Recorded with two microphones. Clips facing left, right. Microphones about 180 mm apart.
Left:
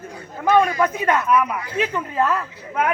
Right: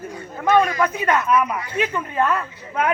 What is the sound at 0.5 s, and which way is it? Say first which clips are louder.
Speech: left 1 dB; 25° left (ahead or behind).